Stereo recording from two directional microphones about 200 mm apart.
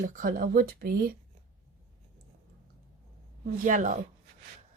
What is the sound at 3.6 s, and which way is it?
Speech, 40° right (ahead or behind).